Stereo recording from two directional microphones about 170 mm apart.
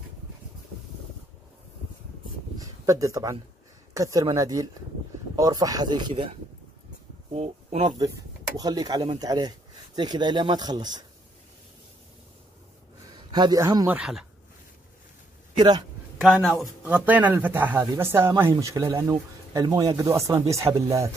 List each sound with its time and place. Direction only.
2.6 s speech: 20° right (ahead or behind)
7.2 s speech: 40° right (ahead or behind)
8.5 s speech: 20° right (ahead or behind)
13.3 s speech: 25° right (ahead or behind)
13.8 s speech: 5° right (ahead or behind)
16.2 s speech: centre (ahead or behind)
16.8 s speech: 10° right (ahead or behind)